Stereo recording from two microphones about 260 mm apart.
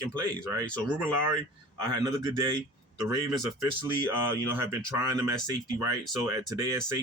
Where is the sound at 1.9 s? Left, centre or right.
Centre.